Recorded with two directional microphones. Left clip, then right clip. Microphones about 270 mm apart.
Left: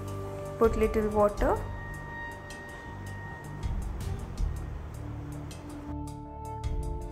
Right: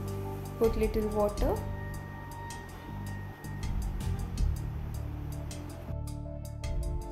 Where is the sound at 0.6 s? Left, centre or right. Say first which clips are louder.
Left 3 dB; centre.